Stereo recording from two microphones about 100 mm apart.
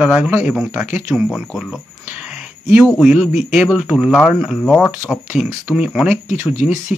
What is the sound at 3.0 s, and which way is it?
Speech, 5° right (ahead or behind).